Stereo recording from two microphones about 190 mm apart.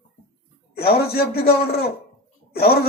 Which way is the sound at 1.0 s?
55° left (ahead or behind).